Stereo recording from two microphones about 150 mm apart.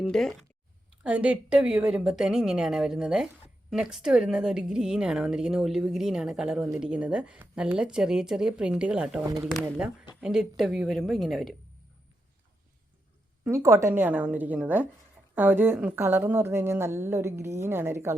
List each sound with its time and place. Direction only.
0.0 s speech: centre (ahead or behind)
1.0 s a woman's voice: 10° right (ahead or behind)
13.4 s a woman's voice: 20° right (ahead or behind)